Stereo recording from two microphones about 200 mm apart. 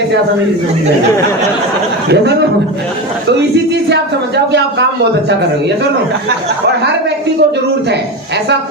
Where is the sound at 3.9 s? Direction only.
60° right (ahead or behind).